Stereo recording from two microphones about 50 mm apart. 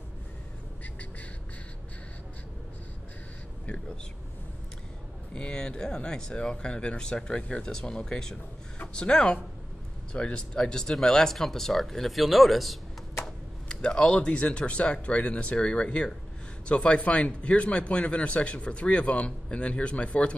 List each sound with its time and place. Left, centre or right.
3.6 s speech: left
5.3 s speech: centre
13.2 s speech: centre